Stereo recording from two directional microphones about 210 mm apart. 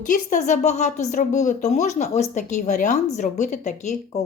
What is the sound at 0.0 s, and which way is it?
Speech, 40° left (ahead or behind).